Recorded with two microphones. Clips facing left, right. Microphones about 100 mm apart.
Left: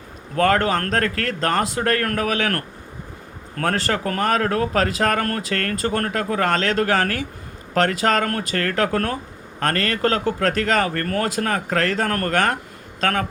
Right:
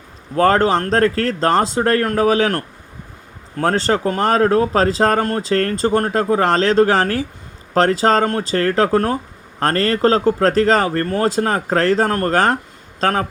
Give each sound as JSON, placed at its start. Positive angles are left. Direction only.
{"t": 0.3, "sound": "speech", "side_deg": -30}